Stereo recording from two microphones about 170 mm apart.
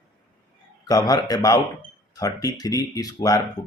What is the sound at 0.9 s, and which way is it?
Speech, 20° left (ahead or behind).